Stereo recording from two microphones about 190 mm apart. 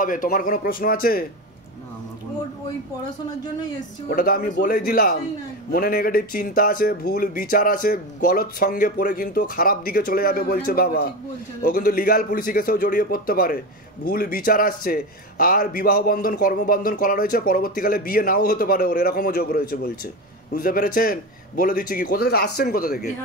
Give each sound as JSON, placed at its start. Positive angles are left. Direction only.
{"t": 0.0, "sound": "a man's voice", "side_deg": 45}
{"t": 4.1, "sound": "a man's voice", "side_deg": 50}